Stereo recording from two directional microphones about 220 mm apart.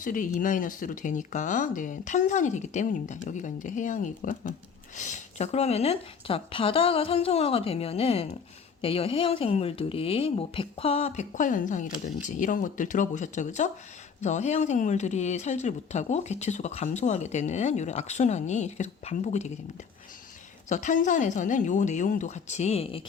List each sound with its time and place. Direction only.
0.0 s a woman's voice: 35° left (ahead or behind)
20.7 s speech: 35° left (ahead or behind)